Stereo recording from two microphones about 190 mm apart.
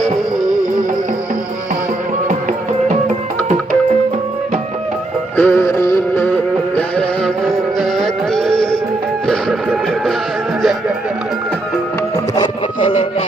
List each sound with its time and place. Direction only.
5.4 s music: 10° left (ahead or behind)
7.4 s music: centre (ahead or behind)
10.6 s music: centre (ahead or behind)
12.4 s a sound: 30° left (ahead or behind)